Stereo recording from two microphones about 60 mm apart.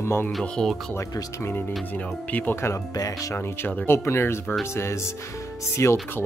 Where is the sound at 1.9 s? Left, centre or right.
Left.